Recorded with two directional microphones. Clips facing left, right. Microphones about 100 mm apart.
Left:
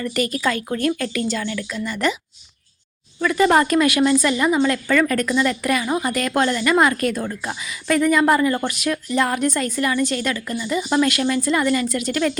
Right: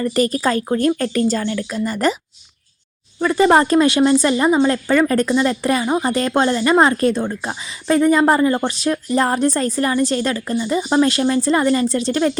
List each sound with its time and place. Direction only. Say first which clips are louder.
0.0 s speech: right 4 dB; 35° right (ahead or behind)
3.2 s speech: right 3 dB; 30° right (ahead or behind)